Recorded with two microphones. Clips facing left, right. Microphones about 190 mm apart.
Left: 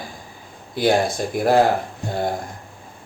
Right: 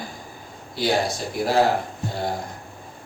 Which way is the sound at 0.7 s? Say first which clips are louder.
Left 4 dB; 55° left (ahead or behind).